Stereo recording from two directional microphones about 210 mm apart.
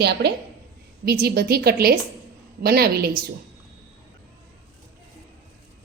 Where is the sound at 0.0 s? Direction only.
50° right (ahead or behind).